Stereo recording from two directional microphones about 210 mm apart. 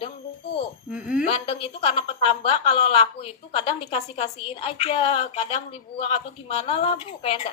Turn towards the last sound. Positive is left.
turn(degrees=25)  # may be behind; listen again after turning